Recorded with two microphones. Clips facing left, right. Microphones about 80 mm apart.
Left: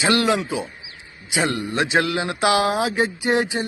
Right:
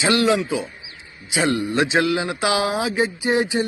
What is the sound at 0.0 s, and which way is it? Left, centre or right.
Speech, left.